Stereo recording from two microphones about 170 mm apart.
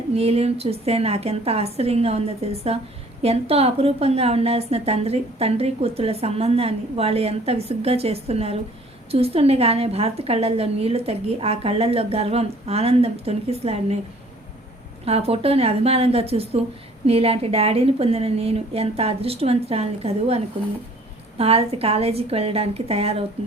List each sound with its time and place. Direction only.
0.1 s a woman's voice: 35° right (ahead or behind)
15.0 s a woman's voice: 35° right (ahead or behind)